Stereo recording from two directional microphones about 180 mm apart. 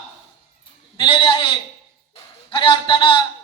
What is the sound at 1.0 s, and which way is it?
Speech, 30° left (ahead or behind).